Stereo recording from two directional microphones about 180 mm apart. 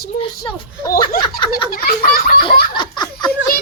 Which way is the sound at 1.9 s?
55° left (ahead or behind).